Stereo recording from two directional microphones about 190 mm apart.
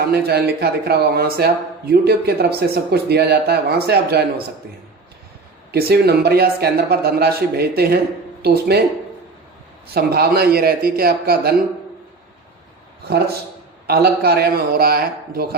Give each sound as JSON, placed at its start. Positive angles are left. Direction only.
{"t": 0.0, "sound": "speech", "side_deg": -55}
{"t": 5.7, "sound": "speech", "side_deg": -55}
{"t": 9.9, "sound": "a man's voice", "side_deg": -55}
{"t": 13.1, "sound": "speech", "side_deg": -55}